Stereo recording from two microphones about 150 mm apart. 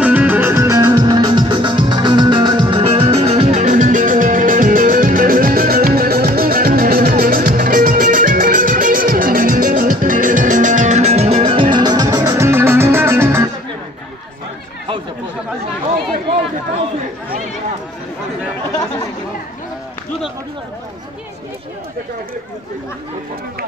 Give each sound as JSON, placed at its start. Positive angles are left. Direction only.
{"t": 0.0, "sound": "music", "side_deg": -10}
{"t": 11.7, "sound": "music", "side_deg": -25}